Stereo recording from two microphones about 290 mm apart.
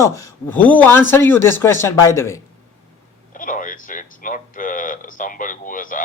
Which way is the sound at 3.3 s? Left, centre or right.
Left.